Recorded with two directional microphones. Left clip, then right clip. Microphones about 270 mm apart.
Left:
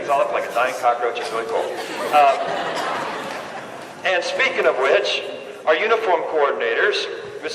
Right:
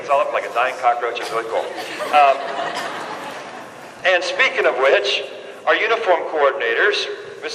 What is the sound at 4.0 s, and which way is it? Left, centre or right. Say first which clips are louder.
A man's voice: right 3 dB; right.